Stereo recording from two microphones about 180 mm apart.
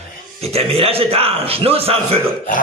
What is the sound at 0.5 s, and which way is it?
A man's voice, 35° right (ahead or behind).